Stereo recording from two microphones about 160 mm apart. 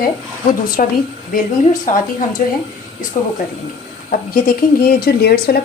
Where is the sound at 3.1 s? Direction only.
50° left (ahead or behind).